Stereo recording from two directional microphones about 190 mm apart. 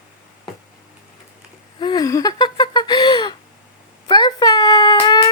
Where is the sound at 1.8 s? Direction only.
20° left (ahead or behind).